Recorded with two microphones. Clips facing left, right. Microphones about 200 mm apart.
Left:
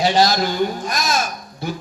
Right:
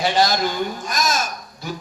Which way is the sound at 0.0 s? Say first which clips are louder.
Left 2 dB; 50° right (ahead or behind).